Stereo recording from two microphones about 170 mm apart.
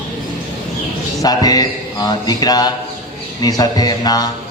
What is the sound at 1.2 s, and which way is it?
A man's voice, 20° left (ahead or behind).